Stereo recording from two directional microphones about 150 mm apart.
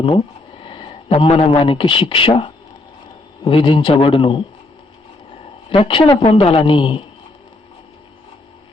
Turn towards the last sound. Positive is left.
turn(degrees=35)  # may be behind; listen again after turning